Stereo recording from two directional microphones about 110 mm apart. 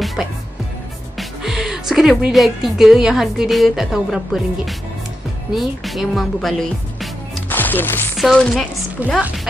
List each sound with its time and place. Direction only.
0.0 s music: centre (ahead or behind)
1.1 s a woman's voice: centre (ahead or behind)
7.4 s music: 15° left (ahead or behind)
8.2 s a woman's voice: 5° left (ahead or behind)
9.0 s speech: 15° right (ahead or behind)